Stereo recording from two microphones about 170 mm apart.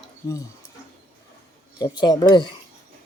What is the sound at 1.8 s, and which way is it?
Speech, 25° left (ahead or behind).